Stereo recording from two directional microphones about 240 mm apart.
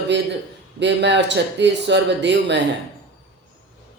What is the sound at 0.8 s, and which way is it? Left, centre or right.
Speech, right.